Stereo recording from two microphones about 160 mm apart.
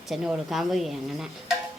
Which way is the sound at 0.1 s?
Centre (ahead or behind).